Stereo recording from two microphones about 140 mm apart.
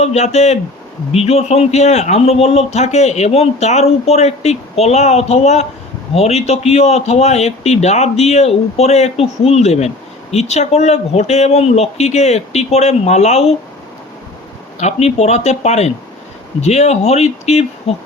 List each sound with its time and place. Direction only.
0.0 s a man's voice: 50° left (ahead or behind)
14.8 s a man's voice: 50° left (ahead or behind)